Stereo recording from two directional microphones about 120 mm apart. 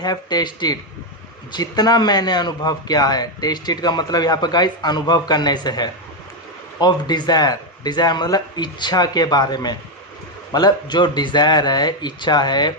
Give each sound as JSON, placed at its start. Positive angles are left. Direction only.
{"t": 0.0, "sound": "a man's voice", "side_deg": 35}